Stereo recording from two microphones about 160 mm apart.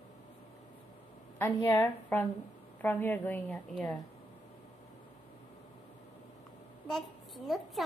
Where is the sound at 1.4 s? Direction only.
15° left (ahead or behind).